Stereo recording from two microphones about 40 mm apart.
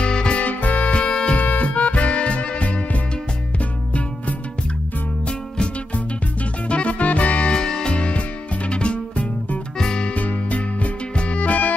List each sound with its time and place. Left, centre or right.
0.0 s music: left
0.4 s music: left
0.9 s music: left
1.4 s music: left
6.7 s music: left
7.5 s music: centre
9.8 s music: centre
10.1 s music: left